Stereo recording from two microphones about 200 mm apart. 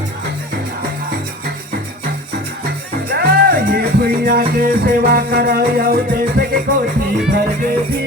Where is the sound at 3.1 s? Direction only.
50° right (ahead or behind).